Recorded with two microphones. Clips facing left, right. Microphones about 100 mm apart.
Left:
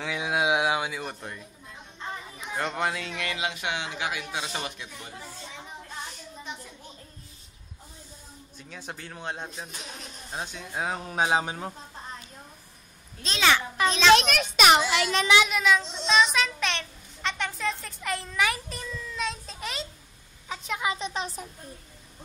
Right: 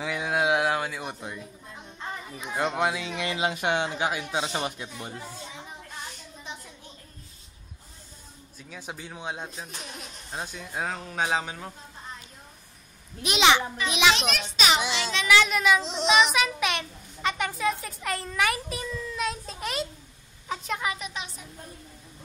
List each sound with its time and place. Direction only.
0.0 s speech: centre (ahead or behind)
1.0 s speech: 10° right (ahead or behind)
2.5 s speech: 10° right (ahead or behind)
3.2 s speech: 25° right (ahead or behind)
8.5 s speech: 10° right (ahead or behind)
11.2 s speech: 25° left (ahead or behind)
13.2 s speech: 15° right (ahead or behind)
14.3 s a child's voice: 55° left (ahead or behind)
15.4 s speech: centre (ahead or behind)
15.8 s speech: 90° right
16.1 s child singing: 10° right (ahead or behind)
20.4 s a woman's voice: centre (ahead or behind)
20.8 s speech: 30° left (ahead or behind)